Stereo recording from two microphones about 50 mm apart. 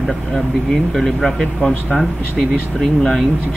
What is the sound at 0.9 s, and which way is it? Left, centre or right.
Speech, centre.